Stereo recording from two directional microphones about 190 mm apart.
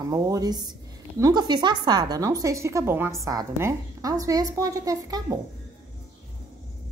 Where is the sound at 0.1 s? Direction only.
20° right (ahead or behind).